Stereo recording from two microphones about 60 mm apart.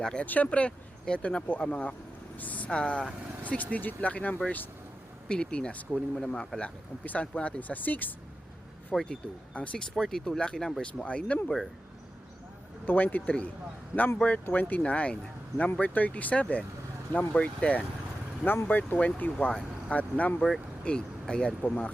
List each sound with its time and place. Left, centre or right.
0.0 s speech: centre
0.3 s speech: left
2.4 s vehicle: left
2.6 s speech: centre
3.6 s speech: left; by 6.5 s centre
6.6 s speech: left
8.9 s speech: centre
9.5 s speech: left
9.8 s speech: centre
11.0 s speech: left
11.4 s speech: centre
12.8 s a man's voice: left
18.4 s a man's voice: left